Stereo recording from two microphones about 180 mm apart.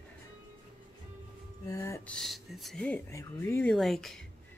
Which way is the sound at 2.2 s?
Centre (ahead or behind).